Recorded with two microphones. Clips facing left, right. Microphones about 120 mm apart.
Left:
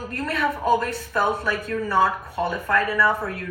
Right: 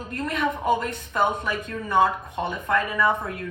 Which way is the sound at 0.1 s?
20° right (ahead or behind).